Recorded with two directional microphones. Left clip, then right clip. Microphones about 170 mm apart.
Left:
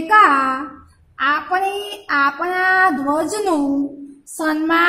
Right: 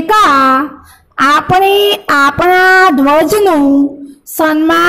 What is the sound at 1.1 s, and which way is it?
A woman's voice, 45° right (ahead or behind).